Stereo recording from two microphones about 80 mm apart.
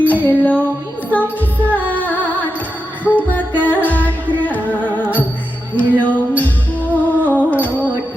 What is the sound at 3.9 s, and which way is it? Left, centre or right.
Music, left.